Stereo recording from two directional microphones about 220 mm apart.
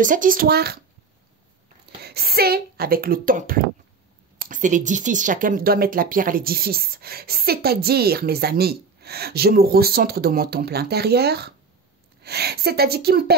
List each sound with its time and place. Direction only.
0.0 s a child's voice: 35° right (ahead or behind)
2.0 s speech: 45° right (ahead or behind)